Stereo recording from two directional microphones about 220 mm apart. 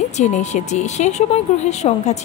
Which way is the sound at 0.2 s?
30° left (ahead or behind).